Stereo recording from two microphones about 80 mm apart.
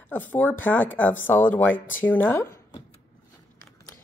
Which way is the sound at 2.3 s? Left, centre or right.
Left.